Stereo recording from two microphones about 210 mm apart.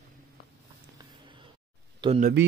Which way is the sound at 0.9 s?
20° right (ahead or behind).